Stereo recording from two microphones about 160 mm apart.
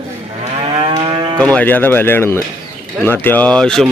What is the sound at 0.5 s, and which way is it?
Moo, 35° right (ahead or behind).